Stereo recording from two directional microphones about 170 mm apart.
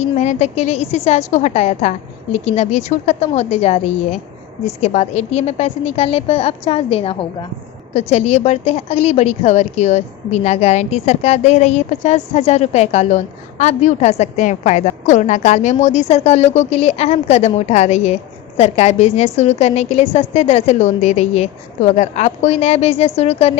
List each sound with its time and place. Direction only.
0.2 s a woman's voice: 40° left (ahead or behind)